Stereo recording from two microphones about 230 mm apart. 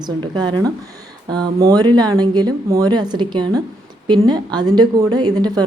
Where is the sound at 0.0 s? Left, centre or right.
Centre.